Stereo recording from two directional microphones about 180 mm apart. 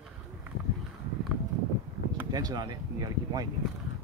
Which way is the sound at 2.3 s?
20° right (ahead or behind).